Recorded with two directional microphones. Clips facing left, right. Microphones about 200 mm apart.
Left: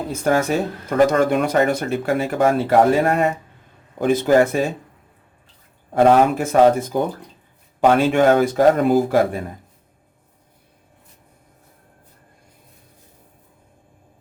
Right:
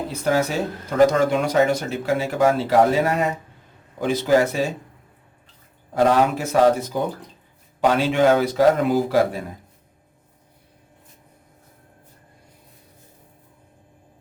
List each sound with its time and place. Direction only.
0.1 s a man's voice: 50° left (ahead or behind)
5.9 s a man's voice: 55° left (ahead or behind)